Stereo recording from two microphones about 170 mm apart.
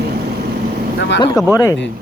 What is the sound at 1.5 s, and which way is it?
Speech, 20° left (ahead or behind).